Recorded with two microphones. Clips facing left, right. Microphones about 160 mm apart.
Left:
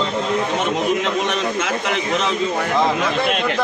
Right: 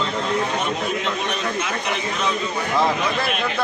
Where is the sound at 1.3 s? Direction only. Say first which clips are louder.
Left 3 dB; 90° left.